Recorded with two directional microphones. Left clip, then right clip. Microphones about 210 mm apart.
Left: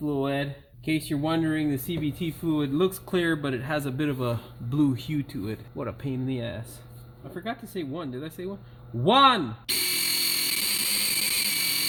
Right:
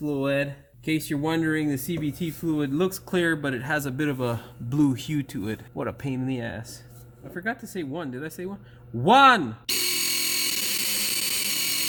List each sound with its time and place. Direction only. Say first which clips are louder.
0.0 s speech: right 2 dB; 35° right (ahead or behind)
7.7 s speech: right 1 dB; 35° right (ahead or behind)
9.6 s tools: left 1 dB; centre (ahead or behind)